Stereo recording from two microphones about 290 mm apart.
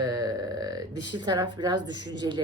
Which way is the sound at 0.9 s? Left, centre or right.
Left.